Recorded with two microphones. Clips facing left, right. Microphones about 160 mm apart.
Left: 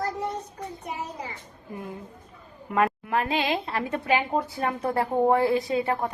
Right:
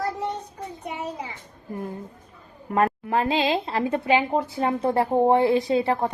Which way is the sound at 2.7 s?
35° right (ahead or behind).